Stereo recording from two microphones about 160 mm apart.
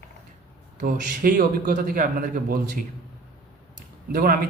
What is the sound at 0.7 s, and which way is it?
Speech, 55° right (ahead or behind).